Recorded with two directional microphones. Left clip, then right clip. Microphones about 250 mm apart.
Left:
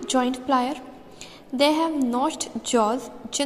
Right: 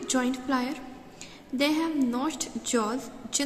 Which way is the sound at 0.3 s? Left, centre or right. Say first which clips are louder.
Left 6 dB; centre.